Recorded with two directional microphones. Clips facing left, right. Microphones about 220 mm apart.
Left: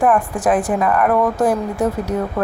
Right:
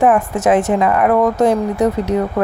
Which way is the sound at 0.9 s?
10° right (ahead or behind).